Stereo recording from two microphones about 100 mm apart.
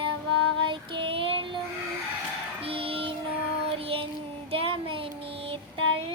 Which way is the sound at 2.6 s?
70° right (ahead or behind).